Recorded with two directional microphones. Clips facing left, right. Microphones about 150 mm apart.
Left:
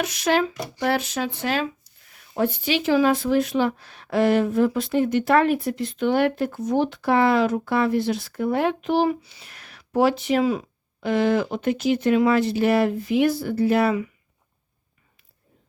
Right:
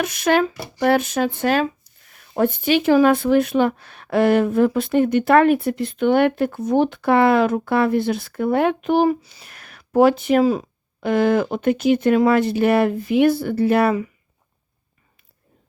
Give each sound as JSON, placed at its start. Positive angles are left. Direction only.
{"t": 0.0, "sound": "speech", "side_deg": -55}
{"t": 11.0, "sound": "speech", "side_deg": -55}